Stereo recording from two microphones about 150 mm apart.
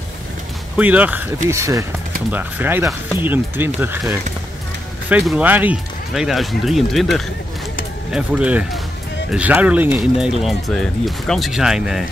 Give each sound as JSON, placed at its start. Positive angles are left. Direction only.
{"t": 0.7, "sound": "speech", "side_deg": -10}
{"t": 5.2, "sound": "speech", "side_deg": -10}